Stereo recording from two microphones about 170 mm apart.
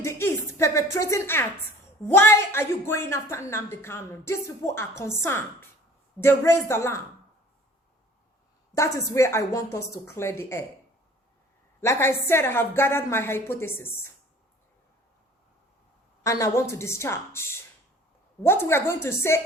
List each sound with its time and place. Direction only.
0.0 s a sound: 15° left (ahead or behind)
2.0 s a woman's voice: 15° left (ahead or behind)
8.7 s a woman's voice: 20° left (ahead or behind)
11.8 s a woman's voice: 15° left (ahead or behind)
16.2 s a woman's voice: 15° left (ahead or behind)